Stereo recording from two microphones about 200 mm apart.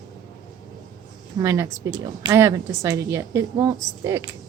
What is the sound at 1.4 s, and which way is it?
A woman's voice, 15° right (ahead or behind).